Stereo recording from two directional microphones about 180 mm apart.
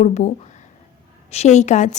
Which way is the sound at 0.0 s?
40° left (ahead or behind).